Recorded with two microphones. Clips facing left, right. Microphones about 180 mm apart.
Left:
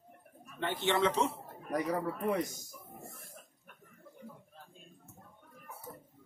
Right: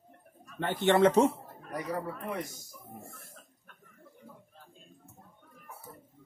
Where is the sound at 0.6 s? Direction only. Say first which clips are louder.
Right 6 dB; 50° right (ahead or behind).